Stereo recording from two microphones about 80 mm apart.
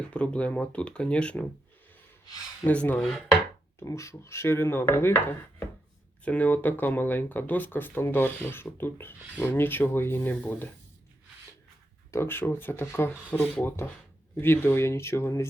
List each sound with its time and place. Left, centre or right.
0.1 s speech: centre
2.6 s speech: left
3.0 s chopping: centre
3.8 s speech: left
10.4 s speech: centre
12.1 s speech: left